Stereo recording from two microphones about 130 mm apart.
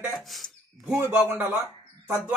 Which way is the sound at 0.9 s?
15° right (ahead or behind).